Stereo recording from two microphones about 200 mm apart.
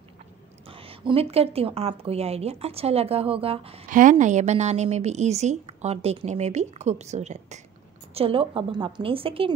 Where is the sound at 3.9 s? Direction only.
40° right (ahead or behind).